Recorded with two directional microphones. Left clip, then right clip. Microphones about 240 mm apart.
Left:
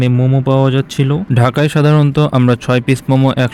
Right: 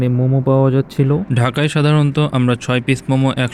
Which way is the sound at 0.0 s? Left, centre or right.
Left.